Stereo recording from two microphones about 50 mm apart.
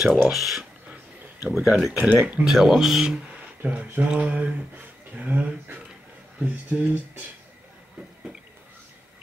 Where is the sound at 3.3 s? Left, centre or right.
Right.